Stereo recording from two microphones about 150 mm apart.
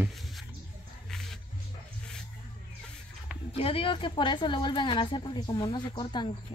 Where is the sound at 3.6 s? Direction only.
40° left (ahead or behind).